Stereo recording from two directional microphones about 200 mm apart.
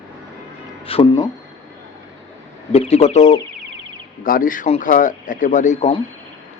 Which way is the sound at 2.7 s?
30° left (ahead or behind).